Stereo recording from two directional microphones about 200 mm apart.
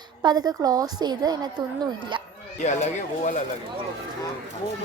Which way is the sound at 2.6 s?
35° left (ahead or behind).